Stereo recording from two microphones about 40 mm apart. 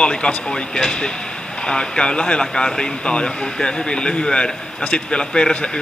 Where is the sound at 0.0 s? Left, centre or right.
Left.